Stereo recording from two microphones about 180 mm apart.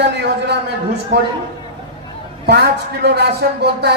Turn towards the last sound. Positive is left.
turn(degrees=-65)  # may be behind; listen again after turning